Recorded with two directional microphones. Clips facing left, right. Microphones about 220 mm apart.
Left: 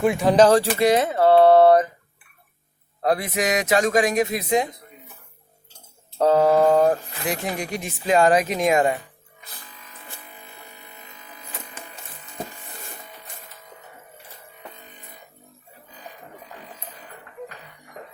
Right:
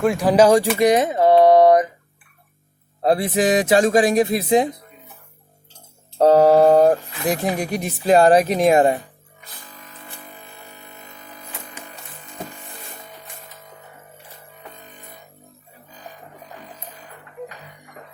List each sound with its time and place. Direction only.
0.0 s speech: centre (ahead or behind)
0.8 s a sound: 15° right (ahead or behind)
3.0 s speech: 30° right (ahead or behind)
6.1 s speech: 40° right (ahead or behind)